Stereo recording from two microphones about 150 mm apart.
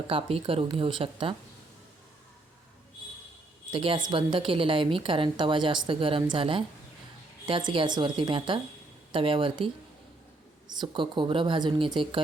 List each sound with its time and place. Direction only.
0.1 s a woman's voice: 40° right (ahead or behind)
3.7 s a woman's voice: 35° right (ahead or behind)
10.7 s a woman's voice: 30° right (ahead or behind)